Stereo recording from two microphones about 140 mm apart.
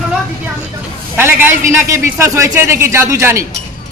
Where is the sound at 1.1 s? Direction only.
15° right (ahead or behind).